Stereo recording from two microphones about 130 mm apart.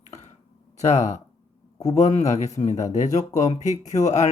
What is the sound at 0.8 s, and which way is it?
Speech, 65° left (ahead or behind).